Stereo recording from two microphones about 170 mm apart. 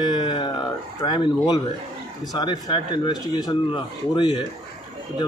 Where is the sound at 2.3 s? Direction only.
25° left (ahead or behind).